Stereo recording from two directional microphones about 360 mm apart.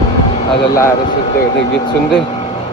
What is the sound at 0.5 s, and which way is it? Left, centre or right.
Speech, centre.